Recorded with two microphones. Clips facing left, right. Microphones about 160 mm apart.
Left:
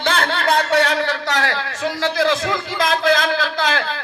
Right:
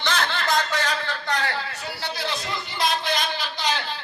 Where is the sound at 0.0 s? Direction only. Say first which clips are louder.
Left 6 dB; 55° left (ahead or behind); by 3.2 s 90° left.